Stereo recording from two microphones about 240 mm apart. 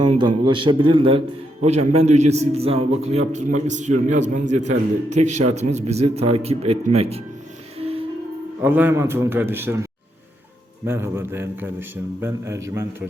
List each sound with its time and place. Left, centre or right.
0.0 s a man's voice: centre
7.8 s music: right
8.6 s a man's voice: centre
10.8 s a man's voice: centre